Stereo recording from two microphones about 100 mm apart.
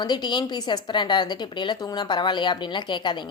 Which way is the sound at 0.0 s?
45° left (ahead or behind).